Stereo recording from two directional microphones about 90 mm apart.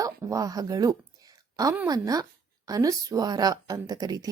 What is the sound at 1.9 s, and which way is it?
A woman's voice, 45° right (ahead or behind).